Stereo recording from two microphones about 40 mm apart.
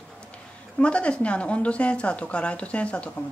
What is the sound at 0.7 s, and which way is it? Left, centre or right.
Speech, left.